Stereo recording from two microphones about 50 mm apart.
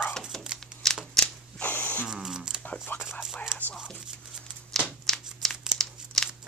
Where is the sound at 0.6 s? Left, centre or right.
Centre.